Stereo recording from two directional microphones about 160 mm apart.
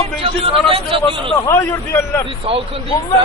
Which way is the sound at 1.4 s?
15° left (ahead or behind).